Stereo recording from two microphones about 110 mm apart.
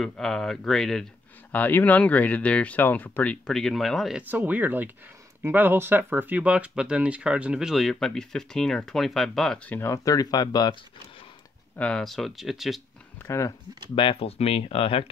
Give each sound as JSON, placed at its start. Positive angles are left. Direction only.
{"t": 0.0, "sound": "speech", "side_deg": 5}
{"t": 1.5, "sound": "speech", "side_deg": 15}
{"t": 4.2, "sound": "speech", "side_deg": -15}
{"t": 9.8, "sound": "speech", "side_deg": 25}
{"t": 11.7, "sound": "speech", "side_deg": 10}
{"t": 13.9, "sound": "speech", "side_deg": 55}